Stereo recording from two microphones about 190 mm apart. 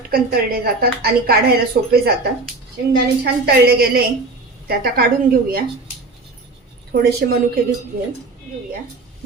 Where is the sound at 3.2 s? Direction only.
55° right (ahead or behind).